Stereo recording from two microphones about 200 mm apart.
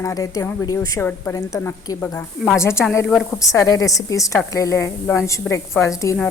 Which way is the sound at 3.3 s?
15° left (ahead or behind).